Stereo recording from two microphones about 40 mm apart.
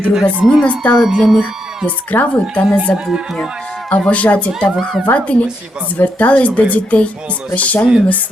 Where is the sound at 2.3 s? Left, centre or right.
Left.